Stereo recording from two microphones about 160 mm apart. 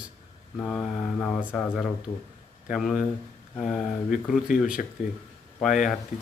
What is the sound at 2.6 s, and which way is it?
Speech, centre (ahead or behind).